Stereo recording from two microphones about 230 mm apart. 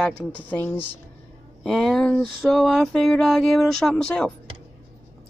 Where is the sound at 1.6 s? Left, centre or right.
Centre.